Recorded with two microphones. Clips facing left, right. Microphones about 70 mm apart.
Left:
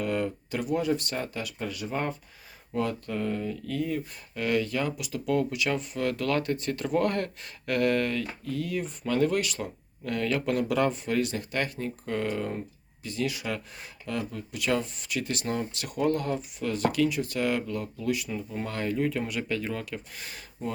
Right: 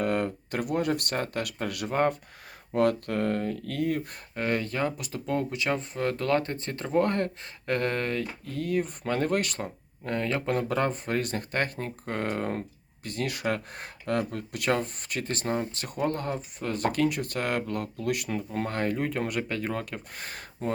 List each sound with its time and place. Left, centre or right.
0.0 s speech: right
4.4 s speech: right
10.0 s speech: right
12.5 s speech: right